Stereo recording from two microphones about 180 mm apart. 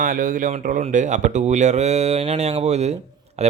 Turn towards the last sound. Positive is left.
turn(degrees=-35)  # may be behind; listen again after turning